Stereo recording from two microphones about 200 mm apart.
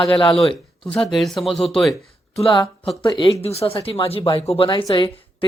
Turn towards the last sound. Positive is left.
turn(degrees=20)  # may be behind; listen again after turning